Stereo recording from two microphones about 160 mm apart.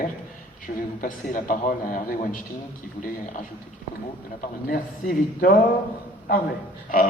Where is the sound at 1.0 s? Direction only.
55° left (ahead or behind).